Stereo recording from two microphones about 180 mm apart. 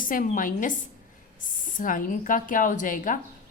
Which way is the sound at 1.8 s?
50° left (ahead or behind).